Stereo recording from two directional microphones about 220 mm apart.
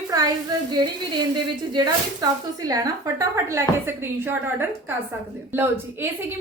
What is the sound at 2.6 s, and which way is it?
A woman's voice, 15° right (ahead or behind).